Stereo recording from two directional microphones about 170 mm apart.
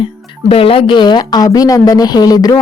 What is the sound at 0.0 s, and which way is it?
Speech, 30° left (ahead or behind).